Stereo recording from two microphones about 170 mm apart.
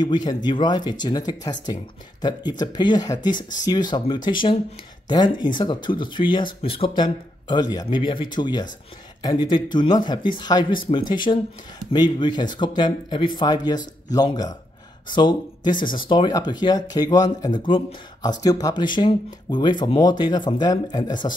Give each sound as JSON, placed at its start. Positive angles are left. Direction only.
{"t": 0.0, "sound": "speech", "side_deg": 25}
{"t": 15.7, "sound": "speech", "side_deg": 55}
{"t": 16.0, "sound": "speech", "side_deg": 30}